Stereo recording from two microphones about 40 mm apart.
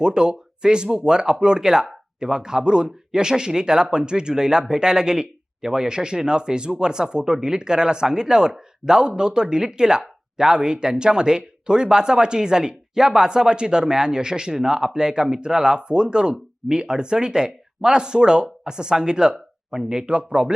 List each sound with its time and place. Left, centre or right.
0.0 s speech: centre